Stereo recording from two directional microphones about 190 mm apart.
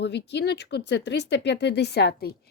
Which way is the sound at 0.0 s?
65° left (ahead or behind).